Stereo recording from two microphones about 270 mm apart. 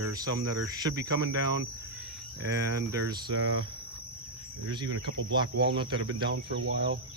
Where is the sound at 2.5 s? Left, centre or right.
Centre.